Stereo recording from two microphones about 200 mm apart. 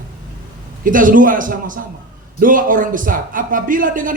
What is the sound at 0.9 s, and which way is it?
A man's voice, 40° right (ahead or behind).